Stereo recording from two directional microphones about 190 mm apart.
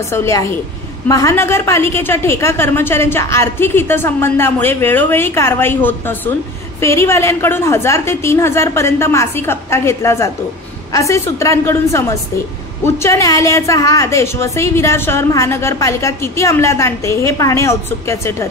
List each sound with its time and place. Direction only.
0.1 s a woman's voice: 15° left (ahead or behind)